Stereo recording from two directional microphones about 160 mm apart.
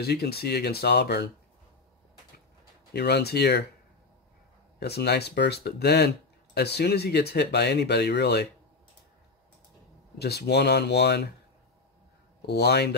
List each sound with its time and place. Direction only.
0.0 s speech: 85° left
2.9 s speech: 90° left
4.7 s speech: 90° left
10.1 s speech: 90° left
12.4 s speech: 90° left